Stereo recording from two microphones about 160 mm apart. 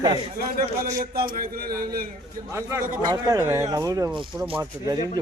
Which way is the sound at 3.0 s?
25° right (ahead or behind).